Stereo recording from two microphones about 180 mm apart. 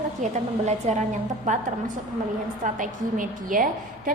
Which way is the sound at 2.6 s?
45° right (ahead or behind).